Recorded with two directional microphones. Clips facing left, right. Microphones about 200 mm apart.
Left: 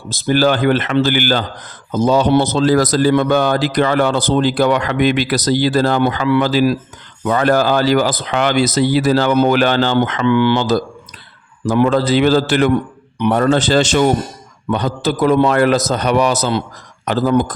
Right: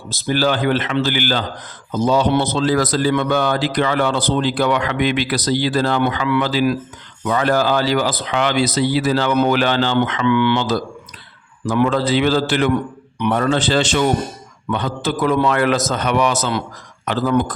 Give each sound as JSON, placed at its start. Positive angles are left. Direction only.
{"t": 0.1, "sound": "a man's voice", "side_deg": 50}